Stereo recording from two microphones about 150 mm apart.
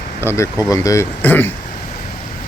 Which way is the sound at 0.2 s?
15° left (ahead or behind).